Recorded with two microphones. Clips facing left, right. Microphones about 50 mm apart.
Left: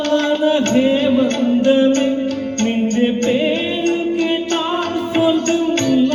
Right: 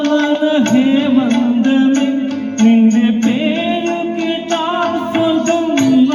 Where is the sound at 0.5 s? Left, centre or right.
Right.